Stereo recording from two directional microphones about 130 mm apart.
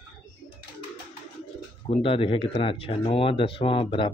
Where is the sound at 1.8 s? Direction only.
45° left (ahead or behind).